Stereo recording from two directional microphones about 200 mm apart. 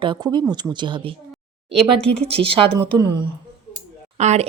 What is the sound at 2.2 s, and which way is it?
Speech, 30° right (ahead or behind).